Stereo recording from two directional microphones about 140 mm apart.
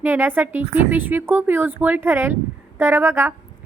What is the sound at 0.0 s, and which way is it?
A woman's voice, 15° right (ahead or behind).